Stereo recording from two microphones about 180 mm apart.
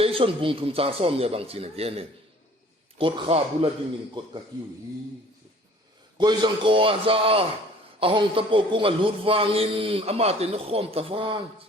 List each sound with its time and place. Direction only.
0.0 s a man's voice: 30° right (ahead or behind)
6.1 s a man's voice: 25° right (ahead or behind)